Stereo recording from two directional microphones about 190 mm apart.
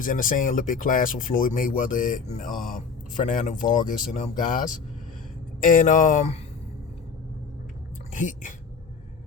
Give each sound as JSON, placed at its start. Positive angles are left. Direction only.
{"t": 0.0, "sound": "speech", "side_deg": 45}
{"t": 8.1, "sound": "speech", "side_deg": 40}